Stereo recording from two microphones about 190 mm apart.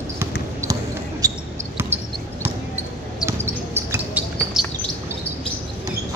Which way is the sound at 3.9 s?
5° right (ahead or behind).